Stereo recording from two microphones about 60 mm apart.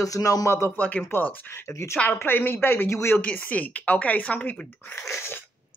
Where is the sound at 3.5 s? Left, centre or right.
Left.